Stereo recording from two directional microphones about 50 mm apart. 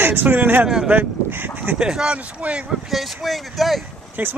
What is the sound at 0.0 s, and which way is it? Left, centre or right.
A man's voice, right.